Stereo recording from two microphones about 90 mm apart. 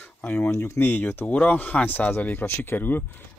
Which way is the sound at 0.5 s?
30° left (ahead or behind).